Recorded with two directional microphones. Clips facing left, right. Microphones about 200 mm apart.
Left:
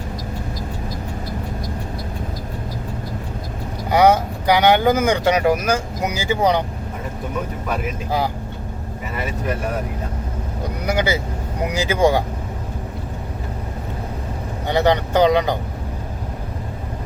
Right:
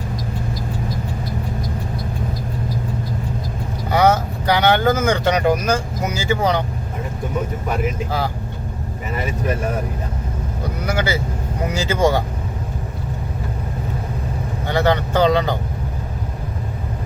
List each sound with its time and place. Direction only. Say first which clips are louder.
3.8 s speech: left 2 dB; 15° left (ahead or behind)
10.8 s speech: left 1 dB; 20° left (ahead or behind)
14.7 s speech: left 1 dB; 15° left (ahead or behind)